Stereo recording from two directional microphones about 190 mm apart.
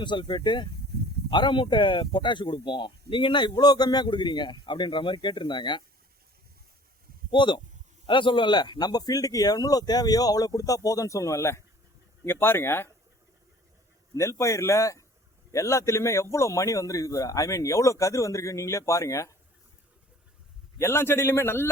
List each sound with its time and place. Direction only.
0.0 s speech: 25° left (ahead or behind)
0.9 s a sound: 55° right (ahead or behind)
1.3 s speech: 25° left (ahead or behind)
7.3 s a man's voice: 25° left (ahead or behind)
14.1 s a man's voice: 15° left (ahead or behind)
20.7 s a man's voice: 15° left (ahead or behind)